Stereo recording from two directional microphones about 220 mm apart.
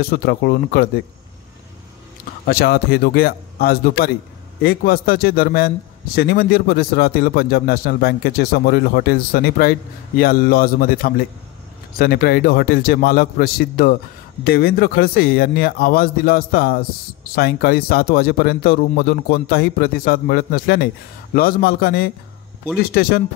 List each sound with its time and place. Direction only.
0.0 s a man's voice: 45° left (ahead or behind)
2.4 s a man's voice: 45° left (ahead or behind)